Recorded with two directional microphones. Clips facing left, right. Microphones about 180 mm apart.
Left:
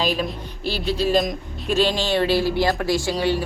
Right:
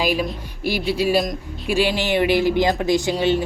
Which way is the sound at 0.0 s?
10° right (ahead or behind).